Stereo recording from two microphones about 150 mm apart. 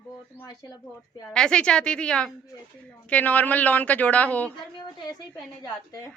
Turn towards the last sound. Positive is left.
turn(degrees=25)  # may be behind; listen again after turning